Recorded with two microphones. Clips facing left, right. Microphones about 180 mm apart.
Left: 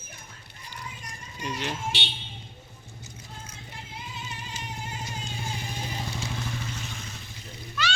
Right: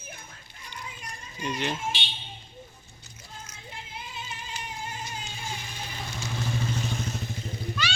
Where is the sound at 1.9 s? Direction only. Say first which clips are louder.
Left 3 dB; 75° left (ahead or behind).